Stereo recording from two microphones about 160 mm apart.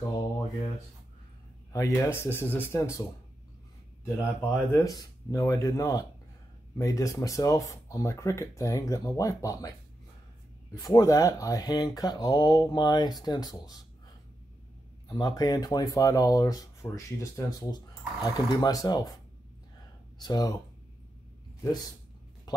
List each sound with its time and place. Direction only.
2.1 s speech: 15° left (ahead or behind)
15.0 s speech: 25° left (ahead or behind)
20.2 s speech: 25° left (ahead or behind)